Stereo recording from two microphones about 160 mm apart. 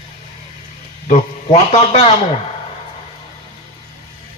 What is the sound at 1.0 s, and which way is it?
A man's voice, 45° left (ahead or behind).